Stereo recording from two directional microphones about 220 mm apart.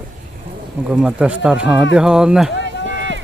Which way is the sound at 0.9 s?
5° right (ahead or behind).